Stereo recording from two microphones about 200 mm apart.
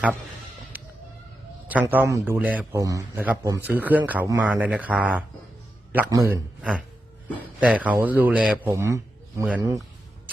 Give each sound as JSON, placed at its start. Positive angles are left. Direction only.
{"t": 1.6, "sound": "a man's voice", "side_deg": -10}